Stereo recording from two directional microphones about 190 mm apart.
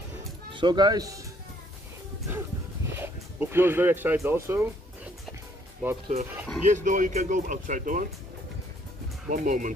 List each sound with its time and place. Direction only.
0.5 s speech: 25° right (ahead or behind)
3.0 s speech: 10° right (ahead or behind)
4.5 s music: 10° right (ahead or behind)
5.8 s speech: 10° right (ahead or behind)
6.6 s speech: 40° right (ahead or behind)
9.3 s speech: 45° right (ahead or behind)